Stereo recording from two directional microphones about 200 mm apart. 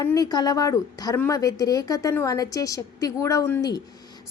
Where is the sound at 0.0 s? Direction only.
15° left (ahead or behind).